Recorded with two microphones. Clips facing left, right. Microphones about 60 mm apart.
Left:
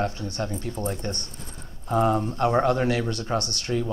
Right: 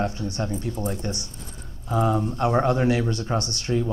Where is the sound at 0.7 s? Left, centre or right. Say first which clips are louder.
Right 1 dB; centre.